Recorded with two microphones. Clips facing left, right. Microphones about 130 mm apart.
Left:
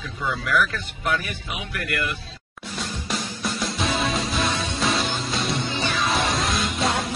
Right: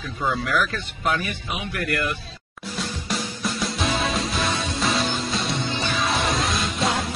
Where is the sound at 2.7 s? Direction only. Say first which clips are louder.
Right 1 dB; centre (ahead or behind).